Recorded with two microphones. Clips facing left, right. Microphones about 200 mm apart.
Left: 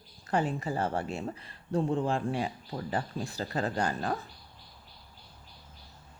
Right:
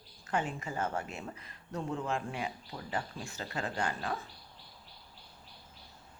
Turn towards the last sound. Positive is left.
turn(degrees=40)  # may be behind; listen again after turning